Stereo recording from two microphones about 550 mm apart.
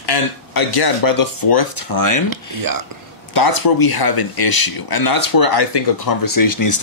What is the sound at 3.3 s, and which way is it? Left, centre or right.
Speech, left.